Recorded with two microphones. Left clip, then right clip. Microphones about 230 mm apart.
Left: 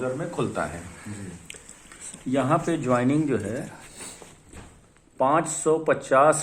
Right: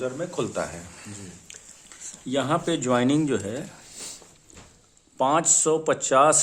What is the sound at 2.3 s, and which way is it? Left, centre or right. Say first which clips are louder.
Speech: left 1 dB; right.